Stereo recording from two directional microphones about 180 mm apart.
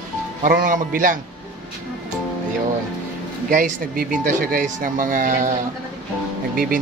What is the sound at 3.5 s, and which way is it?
Speech, 45° right (ahead or behind).